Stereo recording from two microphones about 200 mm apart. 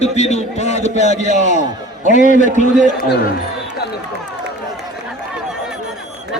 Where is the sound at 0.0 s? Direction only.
35° left (ahead or behind).